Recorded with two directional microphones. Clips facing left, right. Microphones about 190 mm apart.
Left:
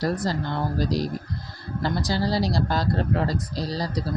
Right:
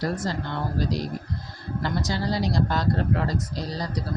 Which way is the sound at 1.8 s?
35° left (ahead or behind).